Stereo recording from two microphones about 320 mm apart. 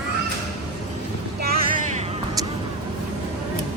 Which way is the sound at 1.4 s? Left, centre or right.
Right.